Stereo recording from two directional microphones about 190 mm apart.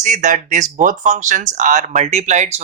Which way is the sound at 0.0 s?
40° right (ahead or behind).